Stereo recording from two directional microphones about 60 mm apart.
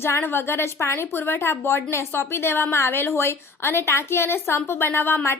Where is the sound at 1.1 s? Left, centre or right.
Left.